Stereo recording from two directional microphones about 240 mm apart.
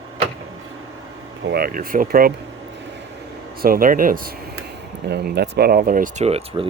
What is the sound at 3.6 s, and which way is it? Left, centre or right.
Speech, right.